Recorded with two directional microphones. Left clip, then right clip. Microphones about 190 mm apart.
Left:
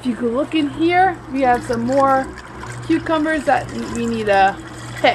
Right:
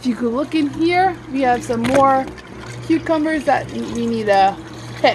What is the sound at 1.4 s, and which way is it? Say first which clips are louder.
Speech: even; 20° right (ahead or behind).